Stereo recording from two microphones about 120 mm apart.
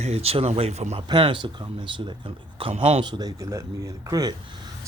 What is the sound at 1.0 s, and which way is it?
A man's voice, 40° right (ahead or behind).